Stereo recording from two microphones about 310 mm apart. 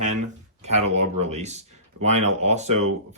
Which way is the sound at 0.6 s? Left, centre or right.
Right.